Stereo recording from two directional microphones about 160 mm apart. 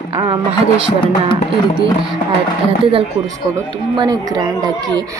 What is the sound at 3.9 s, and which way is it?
Speech, 25° right (ahead or behind).